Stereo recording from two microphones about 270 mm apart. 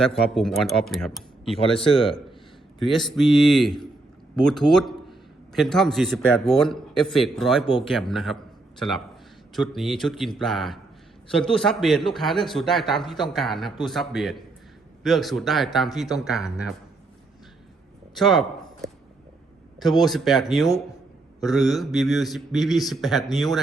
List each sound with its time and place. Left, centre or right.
0.3 s a man's voice: centre
1.8 s speech: centre
2.8 s a man's voice: centre
4.7 s a sound: centre
5.5 s a man's voice: centre
9.6 s a man's voice: centre
18.1 s speech: centre
19.8 s a man's voice: centre